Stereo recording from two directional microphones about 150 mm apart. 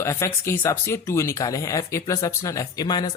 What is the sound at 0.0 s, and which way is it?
Speech, 20° left (ahead or behind).